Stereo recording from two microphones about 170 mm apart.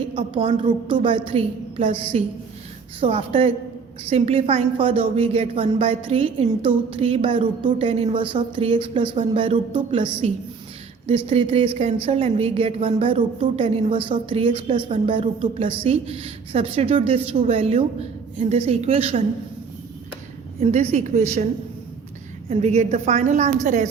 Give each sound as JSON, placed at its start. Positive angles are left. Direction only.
{"t": 0.1, "sound": "a woman's voice", "side_deg": -30}
{"t": 20.6, "sound": "a woman's voice", "side_deg": -40}
{"t": 22.4, "sound": "a woman's voice", "side_deg": -40}